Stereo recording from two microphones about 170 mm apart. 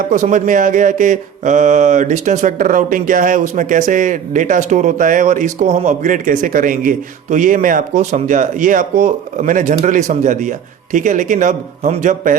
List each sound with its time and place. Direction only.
0.1 s speech: 45° right (ahead or behind)